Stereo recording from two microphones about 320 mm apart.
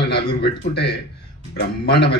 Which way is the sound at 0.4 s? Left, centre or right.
Left.